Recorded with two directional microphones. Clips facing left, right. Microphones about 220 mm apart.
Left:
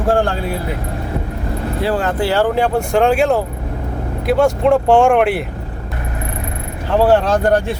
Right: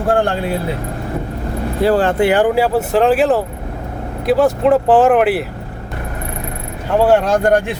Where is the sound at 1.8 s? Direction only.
40° right (ahead or behind).